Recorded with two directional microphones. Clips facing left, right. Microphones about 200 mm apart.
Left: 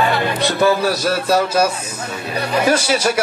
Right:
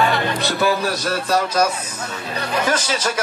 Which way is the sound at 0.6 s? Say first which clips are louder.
Left 5 dB; 10° left (ahead or behind).